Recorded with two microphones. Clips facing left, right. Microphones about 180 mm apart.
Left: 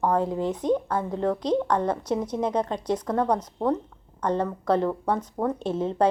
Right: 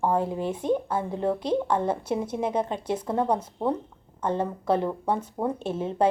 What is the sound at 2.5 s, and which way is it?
Speech, 5° right (ahead or behind).